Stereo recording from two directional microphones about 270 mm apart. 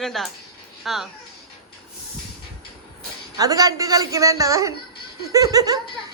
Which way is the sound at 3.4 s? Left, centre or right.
Centre.